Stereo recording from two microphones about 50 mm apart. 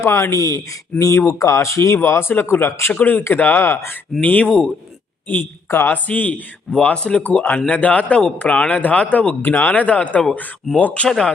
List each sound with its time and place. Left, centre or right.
0.0 s speech: left
1.4 s speech: left
2.0 s speech: left
2.9 s speech: left
3.6 s speech: left
4.2 s speech: left
4.4 s speech: centre
5.3 s speech: left
5.9 s speech: left
6.8 s speech: centre
7.2 s speech: left
9.4 s speech: left
10.7 s speech: centre